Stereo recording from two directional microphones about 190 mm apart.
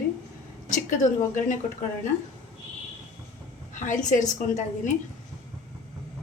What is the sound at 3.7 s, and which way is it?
Speech, 40° left (ahead or behind).